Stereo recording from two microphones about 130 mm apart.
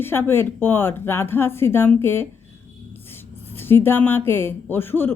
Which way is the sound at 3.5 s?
15° left (ahead or behind).